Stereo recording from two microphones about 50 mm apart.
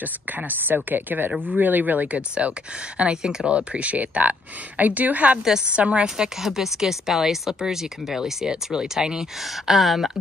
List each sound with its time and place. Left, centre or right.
0.8 s speech: right
6.0 s speech: centre
9.7 s speech: centre